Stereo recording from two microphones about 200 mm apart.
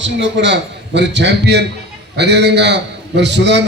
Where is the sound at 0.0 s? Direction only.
65° right (ahead or behind).